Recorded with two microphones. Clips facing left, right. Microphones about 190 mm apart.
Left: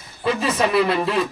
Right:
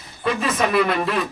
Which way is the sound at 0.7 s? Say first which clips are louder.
Left 1 dB; 30° left (ahead or behind).